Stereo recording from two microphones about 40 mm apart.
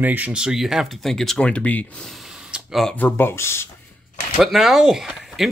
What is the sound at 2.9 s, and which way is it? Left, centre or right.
Speech, left.